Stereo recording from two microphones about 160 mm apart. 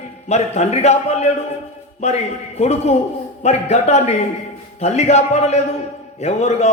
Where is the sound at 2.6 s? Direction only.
45° left (ahead or behind).